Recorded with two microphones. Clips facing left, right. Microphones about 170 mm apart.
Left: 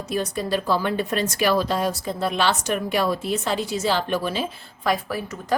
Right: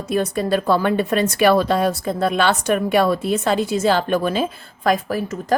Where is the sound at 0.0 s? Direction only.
55° right (ahead or behind).